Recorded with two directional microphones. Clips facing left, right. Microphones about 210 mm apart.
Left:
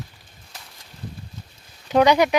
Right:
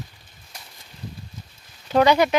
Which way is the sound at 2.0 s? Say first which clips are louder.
Left 1 dB; 15° left (ahead or behind).